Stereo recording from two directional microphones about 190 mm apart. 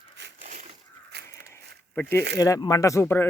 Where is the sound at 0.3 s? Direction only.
45° right (ahead or behind).